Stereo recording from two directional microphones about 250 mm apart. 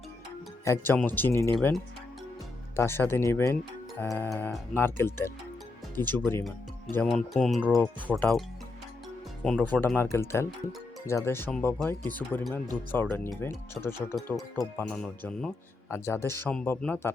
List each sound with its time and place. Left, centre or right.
0.6 s speech: centre